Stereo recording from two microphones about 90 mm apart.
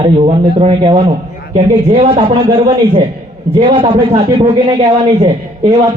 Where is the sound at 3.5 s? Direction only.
70° right (ahead or behind).